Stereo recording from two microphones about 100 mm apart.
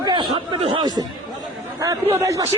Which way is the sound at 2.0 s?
30° right (ahead or behind).